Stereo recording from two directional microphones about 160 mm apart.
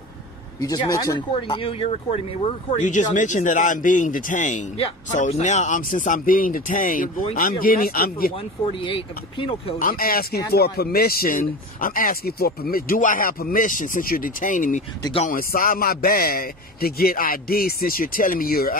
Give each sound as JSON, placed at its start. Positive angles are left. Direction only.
{"t": 0.6, "sound": "speech", "side_deg": 20}
{"t": 1.3, "sound": "speech", "side_deg": 35}
{"t": 2.8, "sound": "a man's voice", "side_deg": 50}
{"t": 8.8, "sound": "speech", "side_deg": 30}
{"t": 9.8, "sound": "speech", "side_deg": 60}